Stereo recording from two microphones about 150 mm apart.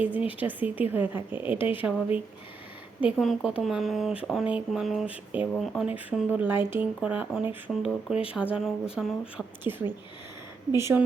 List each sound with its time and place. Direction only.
0.3 s a woman's voice: 10° right (ahead or behind)
3.0 s speech: 5° right (ahead or behind)
6.1 s a woman's voice: 10° right (ahead or behind)
9.6 s a woman's voice: 15° right (ahead or behind)